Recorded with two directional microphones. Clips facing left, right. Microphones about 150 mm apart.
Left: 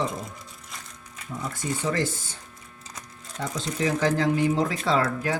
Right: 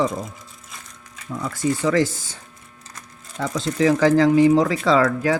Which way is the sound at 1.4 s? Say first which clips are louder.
Right 7 dB; 90° right.